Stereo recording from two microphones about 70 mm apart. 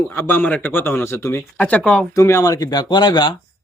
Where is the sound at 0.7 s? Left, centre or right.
Left.